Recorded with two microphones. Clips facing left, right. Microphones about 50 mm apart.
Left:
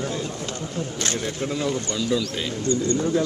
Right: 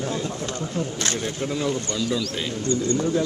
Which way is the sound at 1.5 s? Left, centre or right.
Centre.